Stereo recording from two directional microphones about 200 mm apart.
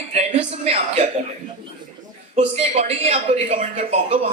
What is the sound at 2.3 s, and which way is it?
Speech, 30° right (ahead or behind).